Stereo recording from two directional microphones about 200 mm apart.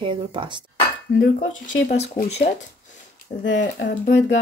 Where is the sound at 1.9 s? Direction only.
35° left (ahead or behind).